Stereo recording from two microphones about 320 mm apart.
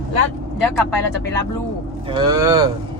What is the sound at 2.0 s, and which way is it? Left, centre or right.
Speech, centre.